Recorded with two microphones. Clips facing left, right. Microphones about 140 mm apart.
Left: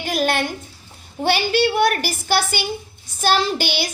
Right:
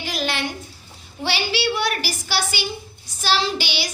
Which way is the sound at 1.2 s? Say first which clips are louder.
Left 6 dB; 50° left (ahead or behind).